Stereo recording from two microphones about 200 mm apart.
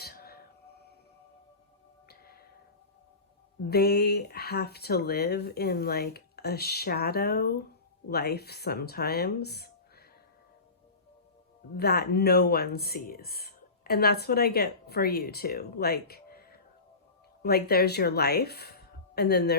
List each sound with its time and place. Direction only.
0.0 s music: 50° left (ahead or behind)
2.0 s music: 50° left (ahead or behind)
3.7 s speech: 55° left (ahead or behind)
11.8 s speech: 50° left (ahead or behind)